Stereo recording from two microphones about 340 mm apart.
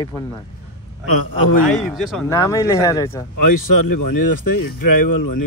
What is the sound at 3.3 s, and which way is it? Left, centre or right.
Speech, left.